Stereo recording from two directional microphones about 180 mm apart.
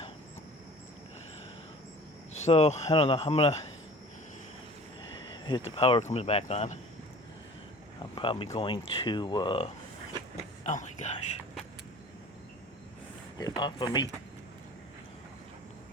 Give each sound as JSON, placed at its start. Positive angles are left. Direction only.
{"t": 2.3, "sound": "speech", "side_deg": 35}
{"t": 5.5, "sound": "speech", "side_deg": 30}
{"t": 8.1, "sound": "speech", "side_deg": 30}
{"t": 10.6, "sound": "speech", "side_deg": 40}
{"t": 13.4, "sound": "speech", "side_deg": 25}